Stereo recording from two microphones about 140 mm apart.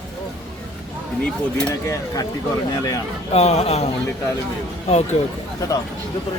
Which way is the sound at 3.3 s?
50° left (ahead or behind).